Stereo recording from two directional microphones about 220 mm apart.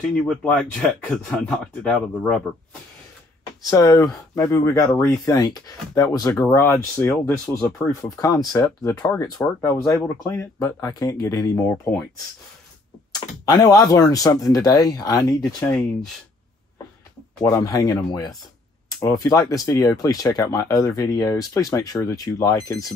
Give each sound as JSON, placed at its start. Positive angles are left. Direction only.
{"t": 0.1, "sound": "speech", "side_deg": 5}
{"t": 3.7, "sound": "speech", "side_deg": 15}
{"t": 13.5, "sound": "speech", "side_deg": 20}
{"t": 17.4, "sound": "speech", "side_deg": 15}